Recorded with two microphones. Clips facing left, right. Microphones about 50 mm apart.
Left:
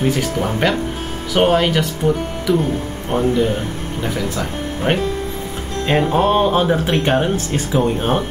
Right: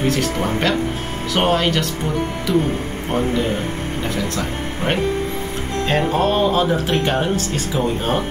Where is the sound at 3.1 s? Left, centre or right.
Centre.